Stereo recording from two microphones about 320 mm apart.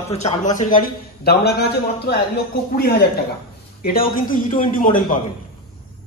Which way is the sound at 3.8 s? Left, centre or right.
Left.